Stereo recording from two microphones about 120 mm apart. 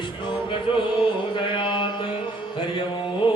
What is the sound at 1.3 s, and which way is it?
Music, 40° left (ahead or behind).